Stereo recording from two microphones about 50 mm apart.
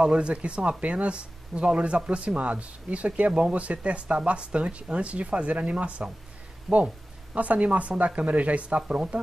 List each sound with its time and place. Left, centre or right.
0.0 s speech: right
6.7 s speech: centre
7.3 s speech: right